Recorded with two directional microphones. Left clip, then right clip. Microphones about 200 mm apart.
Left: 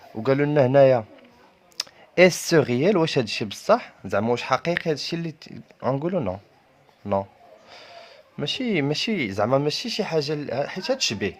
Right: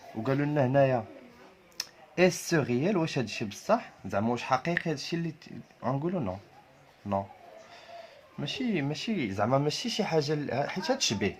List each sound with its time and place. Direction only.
0.2 s speech: 55° left (ahead or behind)
7.7 s speech: 55° left (ahead or behind); by 11.3 s 20° left (ahead or behind)